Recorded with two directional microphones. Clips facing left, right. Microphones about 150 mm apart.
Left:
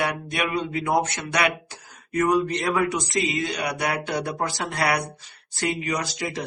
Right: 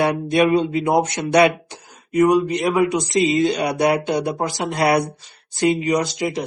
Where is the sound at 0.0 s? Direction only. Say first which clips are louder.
Right 9 dB; 30° right (ahead or behind).